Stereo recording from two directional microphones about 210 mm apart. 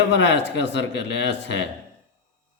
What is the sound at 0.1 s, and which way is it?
A man's voice, 60° left (ahead or behind).